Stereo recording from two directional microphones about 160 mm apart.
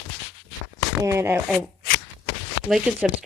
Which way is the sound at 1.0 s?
15° right (ahead or behind).